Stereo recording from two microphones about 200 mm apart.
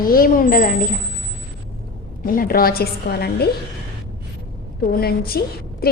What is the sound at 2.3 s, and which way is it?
A woman's voice, 45° left (ahead or behind).